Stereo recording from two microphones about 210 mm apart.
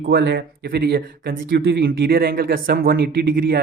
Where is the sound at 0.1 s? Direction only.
45° right (ahead or behind).